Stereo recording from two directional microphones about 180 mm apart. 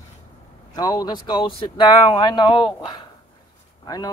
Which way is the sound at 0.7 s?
20° left (ahead or behind).